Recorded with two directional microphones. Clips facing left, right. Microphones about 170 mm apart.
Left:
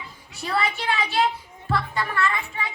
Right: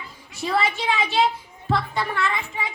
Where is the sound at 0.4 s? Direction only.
15° right (ahead or behind).